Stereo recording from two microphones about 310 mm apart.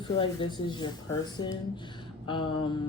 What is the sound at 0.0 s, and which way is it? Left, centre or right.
Speech, centre.